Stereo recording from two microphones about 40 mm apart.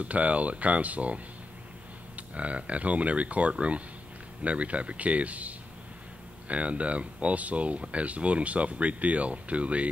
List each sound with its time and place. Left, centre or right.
0.0 s speech: right